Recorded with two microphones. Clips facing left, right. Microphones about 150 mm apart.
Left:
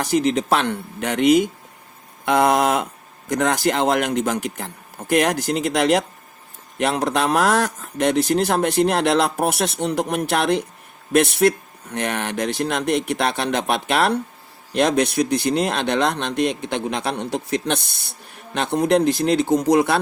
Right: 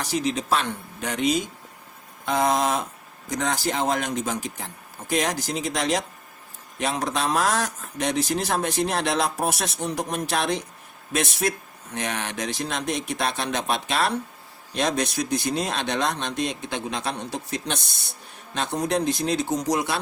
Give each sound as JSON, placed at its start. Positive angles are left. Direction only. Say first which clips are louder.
{"t": 0.0, "sound": "speech", "louder": "left 7 dB", "side_deg": 60}